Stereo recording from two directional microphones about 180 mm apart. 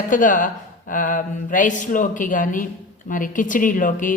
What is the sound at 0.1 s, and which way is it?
Speech, 45° left (ahead or behind).